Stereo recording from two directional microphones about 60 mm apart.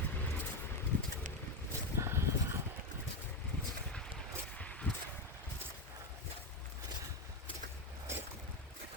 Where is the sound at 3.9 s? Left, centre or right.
Centre.